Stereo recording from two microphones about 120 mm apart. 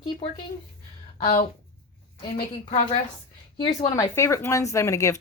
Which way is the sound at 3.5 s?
40° left (ahead or behind).